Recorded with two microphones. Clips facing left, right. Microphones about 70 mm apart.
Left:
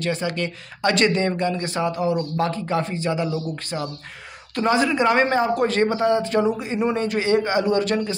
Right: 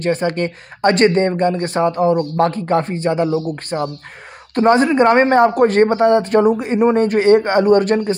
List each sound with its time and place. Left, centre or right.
0.0 s speech: right
3.3 s speech: right
4.6 s a man's voice: right